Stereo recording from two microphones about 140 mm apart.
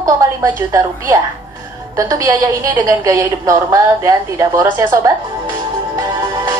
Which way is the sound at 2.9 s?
25° right (ahead or behind).